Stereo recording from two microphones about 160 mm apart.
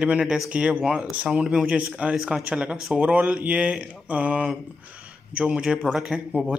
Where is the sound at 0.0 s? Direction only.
5° right (ahead or behind).